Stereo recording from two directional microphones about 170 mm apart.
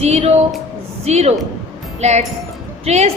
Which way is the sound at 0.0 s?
40° right (ahead or behind).